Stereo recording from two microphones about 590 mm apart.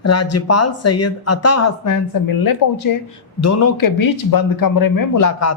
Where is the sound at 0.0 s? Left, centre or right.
Left.